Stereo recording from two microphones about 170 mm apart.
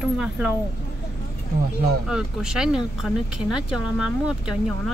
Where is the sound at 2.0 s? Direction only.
5° right (ahead or behind).